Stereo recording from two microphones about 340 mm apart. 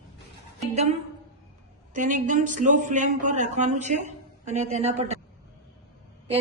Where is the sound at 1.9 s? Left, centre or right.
Right.